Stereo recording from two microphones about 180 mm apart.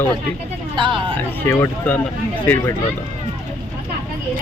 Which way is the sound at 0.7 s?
25° right (ahead or behind).